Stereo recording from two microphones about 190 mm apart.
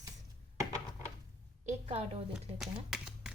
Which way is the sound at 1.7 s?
35° right (ahead or behind).